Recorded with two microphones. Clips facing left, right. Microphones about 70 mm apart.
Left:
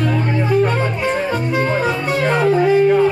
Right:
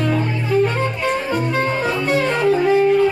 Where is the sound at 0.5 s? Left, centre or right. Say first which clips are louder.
Even; centre.